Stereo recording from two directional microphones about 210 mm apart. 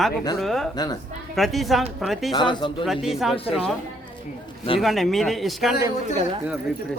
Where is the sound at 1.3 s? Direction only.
Centre (ahead or behind).